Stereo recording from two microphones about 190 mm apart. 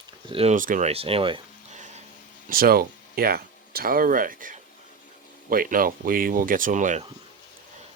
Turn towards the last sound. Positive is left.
turn(degrees=-40)  # may be behind; listen again after turning